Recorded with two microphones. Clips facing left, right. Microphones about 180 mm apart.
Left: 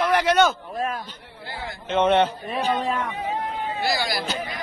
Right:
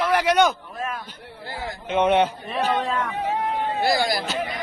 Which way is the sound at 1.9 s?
10° right (ahead or behind).